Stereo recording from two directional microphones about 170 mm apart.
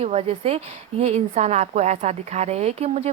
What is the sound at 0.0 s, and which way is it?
A woman's voice, 35° right (ahead or behind).